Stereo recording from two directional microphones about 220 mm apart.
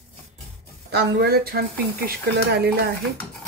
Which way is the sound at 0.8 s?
45° right (ahead or behind).